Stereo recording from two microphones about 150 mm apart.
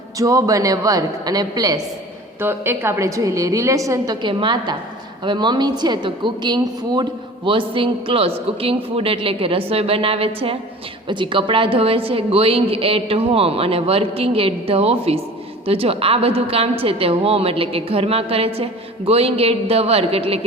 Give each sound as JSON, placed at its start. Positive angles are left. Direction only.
{"t": 0.2, "sound": "a woman's voice", "side_deg": -20}
{"t": 2.4, "sound": "a woman's voice", "side_deg": -15}